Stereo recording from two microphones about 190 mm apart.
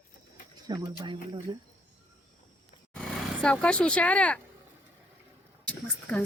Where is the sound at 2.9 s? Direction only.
5° left (ahead or behind).